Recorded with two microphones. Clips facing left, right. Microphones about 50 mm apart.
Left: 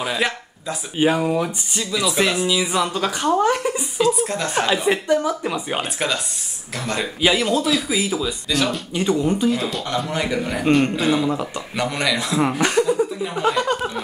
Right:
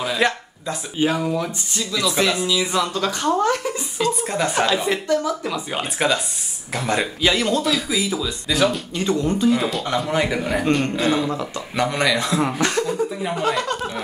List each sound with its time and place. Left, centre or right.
0.0 s a sound: centre
1.0 s a woman's voice: centre
4.8 s speech: centre
5.8 s speech: centre
7.2 s a woman's voice: centre
8.5 s speech: centre
8.9 s a woman's voice: centre
9.6 s speech: centre
10.6 s a woman's voice: centre
11.7 s a woman's voice: centre